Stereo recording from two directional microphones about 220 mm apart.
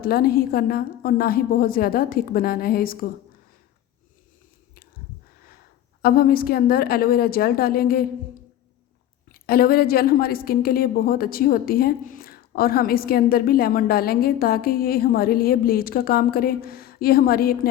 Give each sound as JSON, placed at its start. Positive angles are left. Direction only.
{"t": 0.0, "sound": "a woman's voice", "side_deg": 45}
{"t": 6.0, "sound": "a woman's voice", "side_deg": 40}
{"t": 9.3, "sound": "a woman's voice", "side_deg": 45}